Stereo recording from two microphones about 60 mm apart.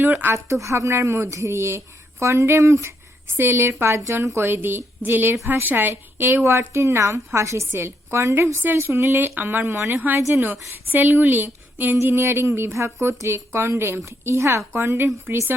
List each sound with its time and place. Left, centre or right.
0.0 s a woman's voice: right
0.3 s speech: right
4.4 s a woman's voice: right
6.4 s a woman's voice: right
10.4 s a woman's voice: right